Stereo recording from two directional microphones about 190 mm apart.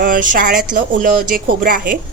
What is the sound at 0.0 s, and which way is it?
Speech, 45° right (ahead or behind).